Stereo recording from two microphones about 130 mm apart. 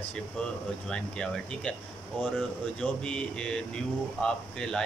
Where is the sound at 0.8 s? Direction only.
5° left (ahead or behind).